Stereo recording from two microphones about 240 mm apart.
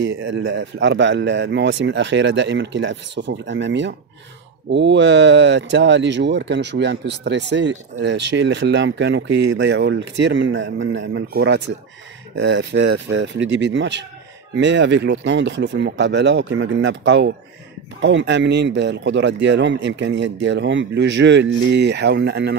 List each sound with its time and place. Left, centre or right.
0.0 s speech: right